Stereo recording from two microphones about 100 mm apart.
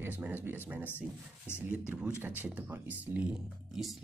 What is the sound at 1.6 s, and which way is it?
Speech, 15° right (ahead or behind).